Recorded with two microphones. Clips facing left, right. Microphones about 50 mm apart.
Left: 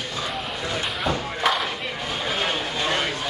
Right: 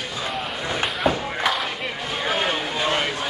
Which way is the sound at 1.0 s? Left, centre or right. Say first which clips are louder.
Right 1 dB; centre.